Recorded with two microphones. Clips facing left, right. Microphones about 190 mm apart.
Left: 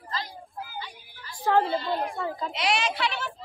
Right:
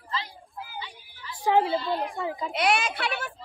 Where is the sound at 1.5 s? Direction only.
15° right (ahead or behind).